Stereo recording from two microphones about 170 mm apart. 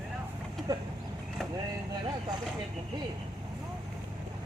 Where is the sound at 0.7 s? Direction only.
20° right (ahead or behind).